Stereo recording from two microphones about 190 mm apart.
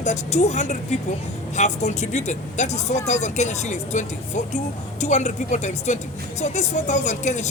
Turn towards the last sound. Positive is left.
turn(degrees=40)  # may be behind; listen again after turning